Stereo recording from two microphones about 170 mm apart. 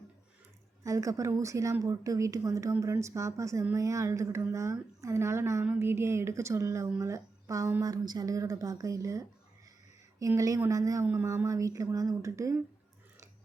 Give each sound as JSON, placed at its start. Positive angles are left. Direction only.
{"t": 0.9, "sound": "a woman's voice", "side_deg": -20}